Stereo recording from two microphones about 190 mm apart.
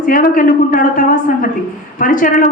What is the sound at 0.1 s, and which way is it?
A woman's voice, 45° left (ahead or behind).